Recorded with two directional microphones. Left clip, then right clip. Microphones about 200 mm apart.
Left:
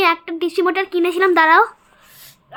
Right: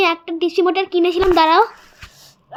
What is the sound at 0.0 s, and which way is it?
A child's voice, 15° left (ahead or behind).